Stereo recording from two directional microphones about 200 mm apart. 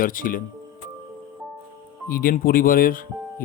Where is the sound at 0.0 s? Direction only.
45° left (ahead or behind).